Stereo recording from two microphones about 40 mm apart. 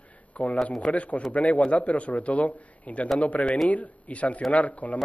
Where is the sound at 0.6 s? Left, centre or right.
Centre.